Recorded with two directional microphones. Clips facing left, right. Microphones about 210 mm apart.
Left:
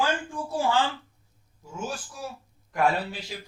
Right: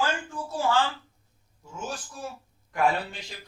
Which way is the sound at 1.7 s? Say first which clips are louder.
Left 2 dB; 5° left (ahead or behind).